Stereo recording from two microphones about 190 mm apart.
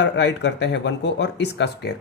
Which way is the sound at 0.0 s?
65° left (ahead or behind).